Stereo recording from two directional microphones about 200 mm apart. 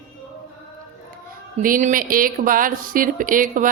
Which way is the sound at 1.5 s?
40° right (ahead or behind).